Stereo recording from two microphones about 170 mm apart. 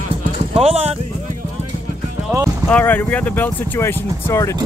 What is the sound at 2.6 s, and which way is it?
Speech, 10° left (ahead or behind).